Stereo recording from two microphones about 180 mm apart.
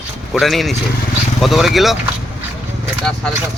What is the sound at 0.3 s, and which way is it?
Speech, centre (ahead or behind).